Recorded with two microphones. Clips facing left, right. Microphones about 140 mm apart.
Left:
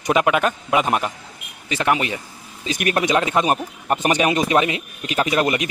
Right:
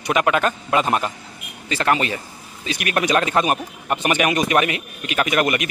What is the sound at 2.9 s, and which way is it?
Speech, 20° left (ahead or behind).